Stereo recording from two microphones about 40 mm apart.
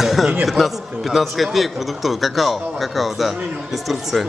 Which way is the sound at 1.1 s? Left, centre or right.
Centre.